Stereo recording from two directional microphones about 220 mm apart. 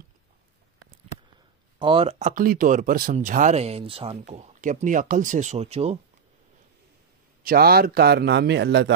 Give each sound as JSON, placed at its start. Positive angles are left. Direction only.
{"t": 1.8, "sound": "speech", "side_deg": -25}
{"t": 7.4, "sound": "speech", "side_deg": -45}